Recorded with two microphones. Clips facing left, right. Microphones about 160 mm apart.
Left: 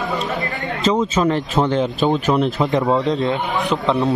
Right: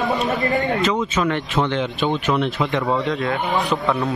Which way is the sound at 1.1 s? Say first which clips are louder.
Left 3 dB; 35° left (ahead or behind).